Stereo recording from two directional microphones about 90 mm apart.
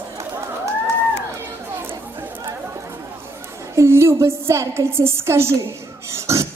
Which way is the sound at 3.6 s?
30° right (ahead or behind).